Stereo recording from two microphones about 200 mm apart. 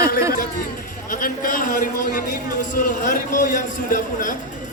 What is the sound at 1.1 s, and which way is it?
A man's voice, 45° left (ahead or behind).